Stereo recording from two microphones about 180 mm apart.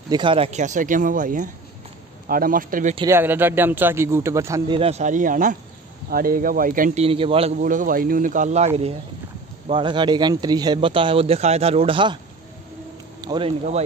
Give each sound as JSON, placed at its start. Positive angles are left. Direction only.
{"t": 0.1, "sound": "speech", "side_deg": -25}
{"t": 3.1, "sound": "a man's voice", "side_deg": -10}
{"t": 4.7, "sound": "speech", "side_deg": -35}
{"t": 7.0, "sound": "speech", "side_deg": -30}
{"t": 7.5, "sound": "a man's voice", "side_deg": -45}
{"t": 13.2, "sound": "speech", "side_deg": -25}